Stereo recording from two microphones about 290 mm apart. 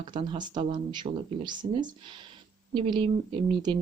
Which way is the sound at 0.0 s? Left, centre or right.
Centre.